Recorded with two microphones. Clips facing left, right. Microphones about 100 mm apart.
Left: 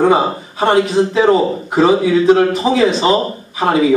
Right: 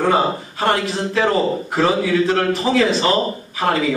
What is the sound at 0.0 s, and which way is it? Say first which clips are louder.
A man's voice: left 4 dB; 20° left (ahead or behind).